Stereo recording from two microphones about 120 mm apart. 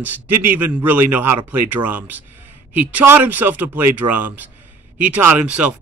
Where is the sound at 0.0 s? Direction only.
15° right (ahead or behind).